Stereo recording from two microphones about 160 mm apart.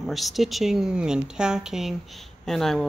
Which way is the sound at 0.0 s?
Centre (ahead or behind).